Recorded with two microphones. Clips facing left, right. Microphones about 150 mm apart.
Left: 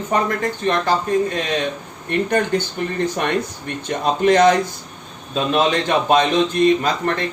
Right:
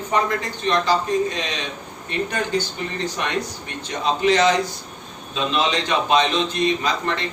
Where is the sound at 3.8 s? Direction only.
55° left (ahead or behind).